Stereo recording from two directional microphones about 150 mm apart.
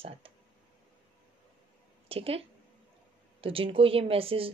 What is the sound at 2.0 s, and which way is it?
A woman's voice, 40° right (ahead or behind).